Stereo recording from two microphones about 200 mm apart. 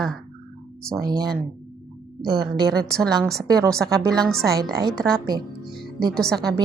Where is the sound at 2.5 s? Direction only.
20° right (ahead or behind).